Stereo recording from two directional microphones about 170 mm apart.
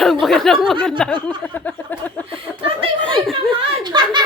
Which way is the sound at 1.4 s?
10° left (ahead or behind).